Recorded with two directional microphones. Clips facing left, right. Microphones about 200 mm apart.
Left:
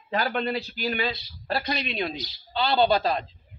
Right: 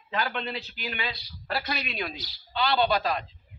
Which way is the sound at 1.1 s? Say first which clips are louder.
Left 3 dB; 25° left (ahead or behind).